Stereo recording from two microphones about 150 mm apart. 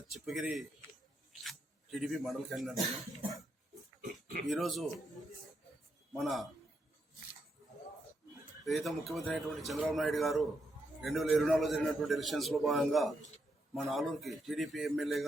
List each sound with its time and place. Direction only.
0.1 s a man's voice: centre (ahead or behind)
4.0 s pig: 65° right (ahead or behind)
4.4 s a man's voice: centre (ahead or behind)
6.1 s a man's voice: centre (ahead or behind)
8.6 s a man's voice: centre (ahead or behind)